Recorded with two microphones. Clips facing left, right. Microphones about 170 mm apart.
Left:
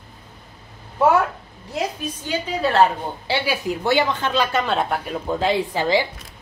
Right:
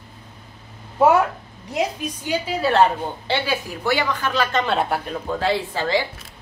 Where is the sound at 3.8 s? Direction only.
25° left (ahead or behind).